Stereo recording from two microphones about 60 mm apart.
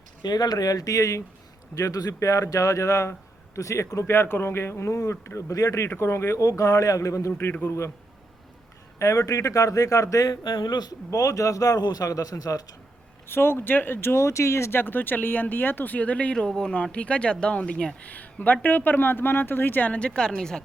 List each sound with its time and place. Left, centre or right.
0.3 s speech: left
1.7 s a man's voice: left
5.9 s speech: left
6.4 s a man's voice: left
9.0 s a man's voice: left
13.2 s speech: left
14.8 s speech: left
19.9 s speech: centre